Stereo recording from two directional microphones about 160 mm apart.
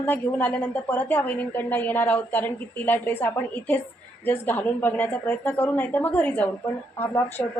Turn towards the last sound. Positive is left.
turn(degrees=15)  # may be behind; listen again after turning